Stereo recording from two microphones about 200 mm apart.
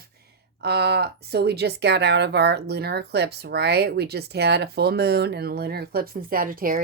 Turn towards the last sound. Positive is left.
turn(degrees=-45)  # may be behind; listen again after turning